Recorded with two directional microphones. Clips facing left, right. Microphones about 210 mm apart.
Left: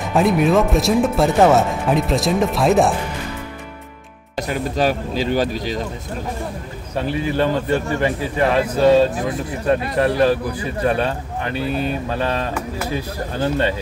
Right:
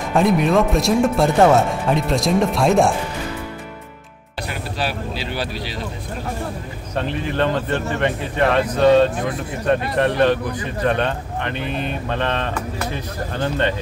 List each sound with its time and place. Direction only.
0.1 s a man's voice: centre (ahead or behind)
4.4 s speech: 45° left (ahead or behind)
7.0 s a man's voice: 5° left (ahead or behind)